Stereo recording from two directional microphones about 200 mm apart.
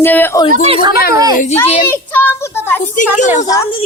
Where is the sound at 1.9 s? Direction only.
10° left (ahead or behind).